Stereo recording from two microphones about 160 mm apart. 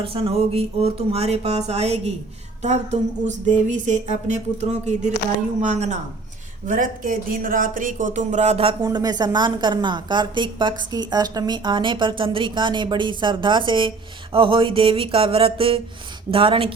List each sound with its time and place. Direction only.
0.0 s speech: 35° right (ahead or behind)
2.6 s music: 45° right (ahead or behind)
5.5 s music: 45° right (ahead or behind)
6.7 s speech: 55° right (ahead or behind); by 16.7 s 35° right (ahead or behind)